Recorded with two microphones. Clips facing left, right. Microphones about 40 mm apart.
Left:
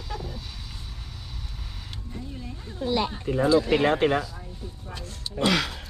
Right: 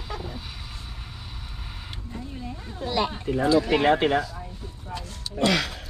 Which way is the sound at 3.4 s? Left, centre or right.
Right.